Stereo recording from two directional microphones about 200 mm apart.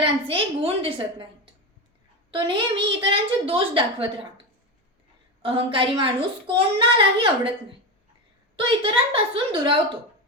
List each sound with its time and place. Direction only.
0.0 s a woman's voice: 25° right (ahead or behind)
2.3 s a woman's voice: 25° right (ahead or behind)
5.4 s a woman's voice: 25° right (ahead or behind)